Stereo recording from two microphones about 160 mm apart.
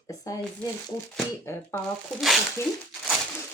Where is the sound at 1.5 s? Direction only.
15° left (ahead or behind).